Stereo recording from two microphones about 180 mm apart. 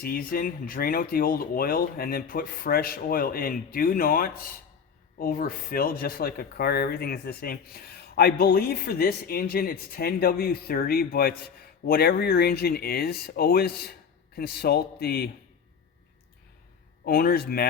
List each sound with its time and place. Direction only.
0.0 s speech: 55° left (ahead or behind)
17.1 s speech: 55° left (ahead or behind)